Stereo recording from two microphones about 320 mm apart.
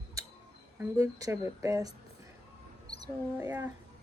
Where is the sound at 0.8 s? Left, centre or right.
Centre.